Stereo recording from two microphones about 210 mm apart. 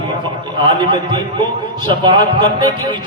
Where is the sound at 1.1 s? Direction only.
20° right (ahead or behind).